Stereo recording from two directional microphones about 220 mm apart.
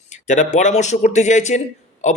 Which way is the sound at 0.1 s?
35° left (ahead or behind).